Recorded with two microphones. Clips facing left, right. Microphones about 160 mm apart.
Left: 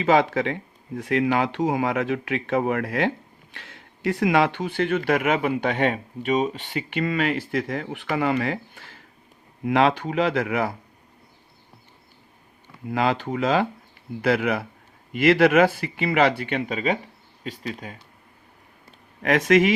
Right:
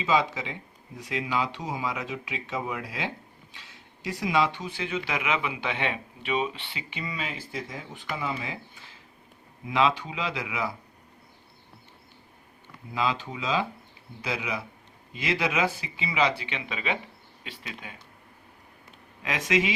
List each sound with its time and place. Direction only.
0.0 s speech: 55° left (ahead or behind)
6.9 s speech: 60° left (ahead or behind)
12.9 s speech: 60° left (ahead or behind); by 17.9 s 40° left (ahead or behind)
19.2 s speech: 55° left (ahead or behind)